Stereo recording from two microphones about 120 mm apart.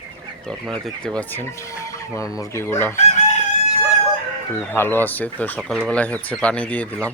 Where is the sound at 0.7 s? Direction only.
5° left (ahead or behind); by 2.4 s 30° left (ahead or behind).